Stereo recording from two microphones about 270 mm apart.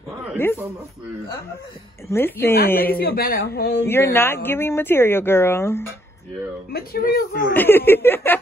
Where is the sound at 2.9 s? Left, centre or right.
Left.